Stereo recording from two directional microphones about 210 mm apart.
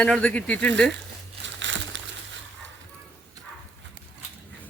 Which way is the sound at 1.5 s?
60° right (ahead or behind).